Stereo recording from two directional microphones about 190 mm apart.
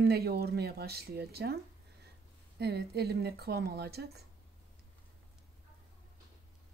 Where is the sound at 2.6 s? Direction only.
55° right (ahead or behind).